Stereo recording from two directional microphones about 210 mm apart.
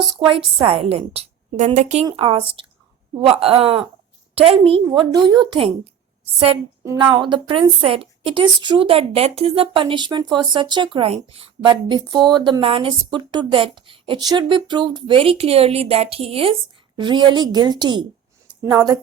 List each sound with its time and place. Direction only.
0.3 s a woman's voice: 25° right (ahead or behind)
6.8 s a woman's voice: 15° right (ahead or behind)